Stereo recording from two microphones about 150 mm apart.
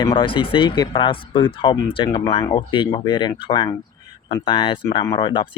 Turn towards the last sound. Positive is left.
turn(degrees=30)  # may be behind; listen again after turning